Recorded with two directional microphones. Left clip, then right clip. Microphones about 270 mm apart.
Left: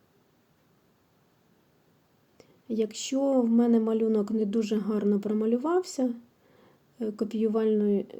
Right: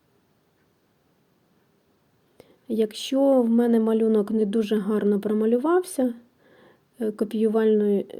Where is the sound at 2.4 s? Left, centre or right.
Centre.